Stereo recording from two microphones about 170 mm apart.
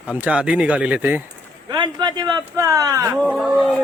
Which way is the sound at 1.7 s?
25° right (ahead or behind).